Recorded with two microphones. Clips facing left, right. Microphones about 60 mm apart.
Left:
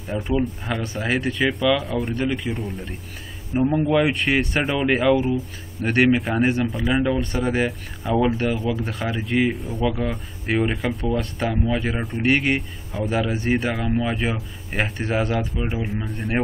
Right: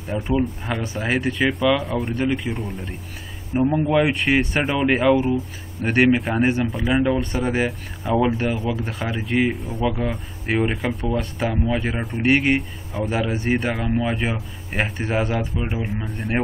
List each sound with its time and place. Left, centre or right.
0.4 s speech: centre